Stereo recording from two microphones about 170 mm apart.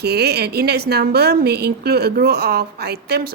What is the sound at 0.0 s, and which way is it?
A woman's voice, 70° right (ahead or behind).